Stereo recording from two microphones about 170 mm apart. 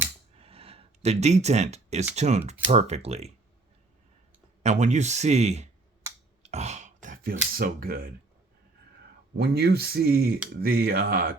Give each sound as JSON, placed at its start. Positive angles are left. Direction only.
{"t": 0.3, "sound": "a sound", "side_deg": -35}
{"t": 2.1, "sound": "speech", "side_deg": -40}
{"t": 4.6, "sound": "speech", "side_deg": -45}
{"t": 9.4, "sound": "speech", "side_deg": -70}